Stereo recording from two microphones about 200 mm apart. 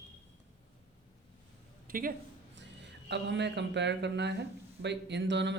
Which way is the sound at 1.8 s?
45° right (ahead or behind).